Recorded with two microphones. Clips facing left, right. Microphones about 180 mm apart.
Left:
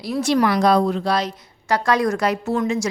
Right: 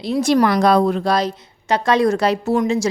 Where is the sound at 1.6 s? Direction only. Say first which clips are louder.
Right 3 dB; 25° right (ahead or behind).